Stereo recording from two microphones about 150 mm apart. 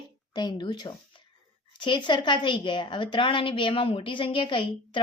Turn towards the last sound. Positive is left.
turn(degrees=35)  # may be behind; listen again after turning